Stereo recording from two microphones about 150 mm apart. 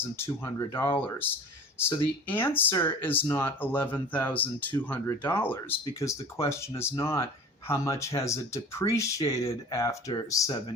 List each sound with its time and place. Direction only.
0.0 s speech: 15° left (ahead or behind)